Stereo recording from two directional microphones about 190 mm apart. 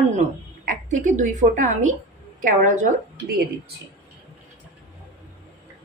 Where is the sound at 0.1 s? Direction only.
40° right (ahead or behind).